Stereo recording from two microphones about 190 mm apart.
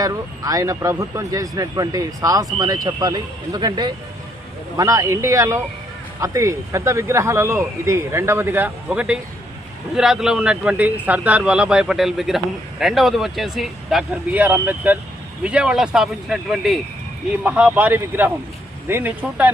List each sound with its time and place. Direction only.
0.0 s a man's voice: 20° right (ahead or behind)